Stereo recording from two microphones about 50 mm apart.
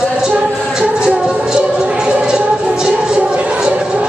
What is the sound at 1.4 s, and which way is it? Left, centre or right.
Music, centre.